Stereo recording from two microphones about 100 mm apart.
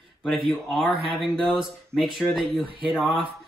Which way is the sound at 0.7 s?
Centre (ahead or behind).